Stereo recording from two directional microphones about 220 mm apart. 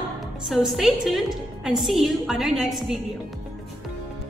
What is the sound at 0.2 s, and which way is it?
A woman's voice, centre (ahead or behind).